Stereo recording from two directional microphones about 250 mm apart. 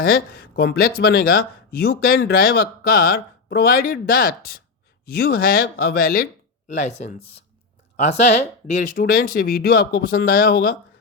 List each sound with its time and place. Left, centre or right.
0.0 s speech: left
6.8 s speech: left
8.7 s speech: left